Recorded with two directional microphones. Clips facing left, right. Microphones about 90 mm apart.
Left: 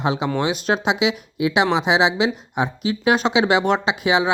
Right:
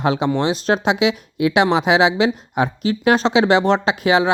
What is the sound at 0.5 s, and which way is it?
Speech, 40° right (ahead or behind).